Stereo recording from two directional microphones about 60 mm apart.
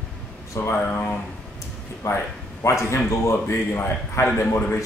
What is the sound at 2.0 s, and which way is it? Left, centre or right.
A man's voice, left.